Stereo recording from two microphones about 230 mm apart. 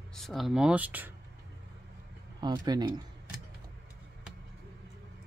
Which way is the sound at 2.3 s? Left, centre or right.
Centre.